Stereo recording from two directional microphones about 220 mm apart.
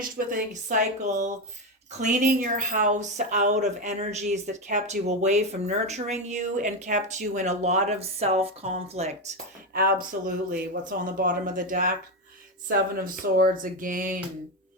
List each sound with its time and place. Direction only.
0.0 s speech: 40° right (ahead or behind)
9.7 s speech: 45° right (ahead or behind)